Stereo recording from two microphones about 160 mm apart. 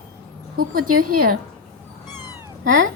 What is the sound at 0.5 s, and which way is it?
Speech, 65° right (ahead or behind).